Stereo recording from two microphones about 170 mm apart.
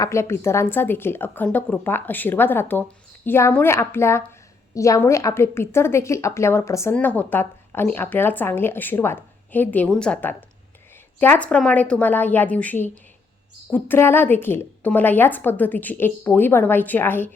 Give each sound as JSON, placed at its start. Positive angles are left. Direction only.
{"t": 0.0, "sound": "a woman's voice", "side_deg": 15}